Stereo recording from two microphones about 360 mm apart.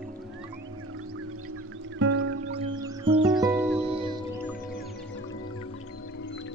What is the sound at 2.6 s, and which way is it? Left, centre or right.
Music, centre.